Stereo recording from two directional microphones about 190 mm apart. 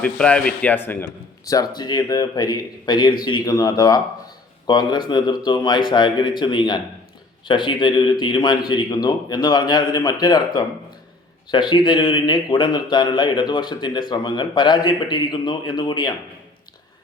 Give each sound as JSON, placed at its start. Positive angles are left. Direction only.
{"t": 0.0, "sound": "a man's voice", "side_deg": 5}